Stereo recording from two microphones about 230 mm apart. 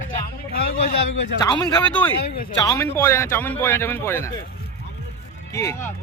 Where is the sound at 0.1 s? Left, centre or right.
Left.